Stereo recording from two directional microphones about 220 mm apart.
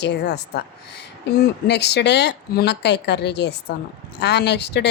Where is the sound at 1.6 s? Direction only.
50° left (ahead or behind).